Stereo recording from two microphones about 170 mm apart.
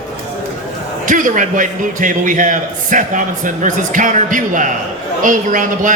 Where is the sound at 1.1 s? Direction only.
50° right (ahead or behind).